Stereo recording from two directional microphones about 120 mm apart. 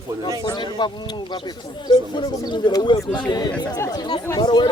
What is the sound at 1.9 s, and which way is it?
Speech, 40° left (ahead or behind).